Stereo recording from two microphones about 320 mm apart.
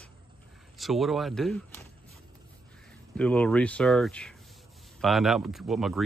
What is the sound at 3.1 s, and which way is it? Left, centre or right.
Speech, centre.